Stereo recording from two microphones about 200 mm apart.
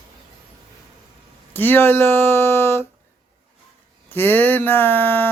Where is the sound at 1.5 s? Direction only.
10° left (ahead or behind).